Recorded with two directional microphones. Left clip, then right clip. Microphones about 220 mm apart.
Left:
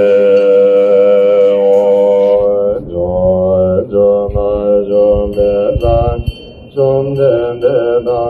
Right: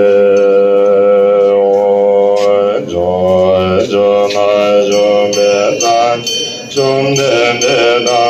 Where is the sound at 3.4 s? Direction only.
45° right (ahead or behind).